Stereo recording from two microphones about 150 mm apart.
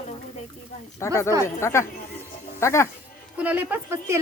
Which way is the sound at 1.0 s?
20° left (ahead or behind).